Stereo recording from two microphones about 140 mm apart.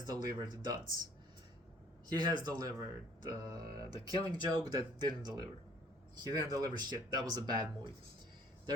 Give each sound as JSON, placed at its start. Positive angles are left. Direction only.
{"t": 0.0, "sound": "speech", "side_deg": -30}
{"t": 2.0, "sound": "speech", "side_deg": -30}